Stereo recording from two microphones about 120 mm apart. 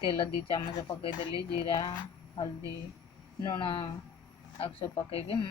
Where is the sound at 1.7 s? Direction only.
35° left (ahead or behind).